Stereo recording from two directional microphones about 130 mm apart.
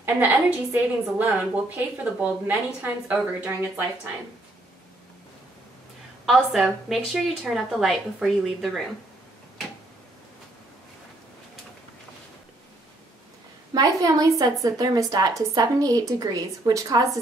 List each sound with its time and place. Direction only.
0.0 s a woman's voice: 10° right (ahead or behind)
6.2 s a woman's voice: centre (ahead or behind)
13.7 s a woman's voice: 30° right (ahead or behind)